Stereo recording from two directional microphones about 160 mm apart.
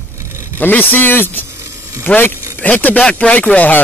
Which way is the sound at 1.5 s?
20° right (ahead or behind).